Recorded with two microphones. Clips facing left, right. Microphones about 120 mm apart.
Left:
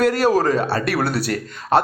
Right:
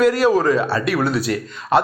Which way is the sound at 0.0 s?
60° left (ahead or behind).